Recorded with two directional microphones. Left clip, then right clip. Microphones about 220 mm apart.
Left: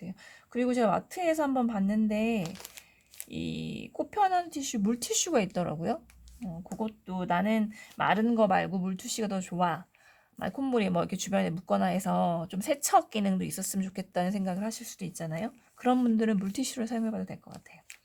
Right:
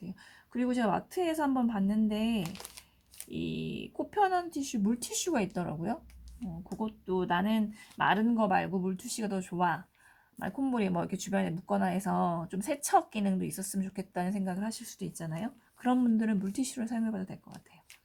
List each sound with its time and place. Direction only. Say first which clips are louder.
0.5 s speech: left 4 dB; 35° left (ahead or behind)